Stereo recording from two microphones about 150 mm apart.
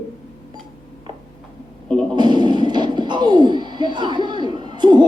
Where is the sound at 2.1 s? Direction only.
30° right (ahead or behind).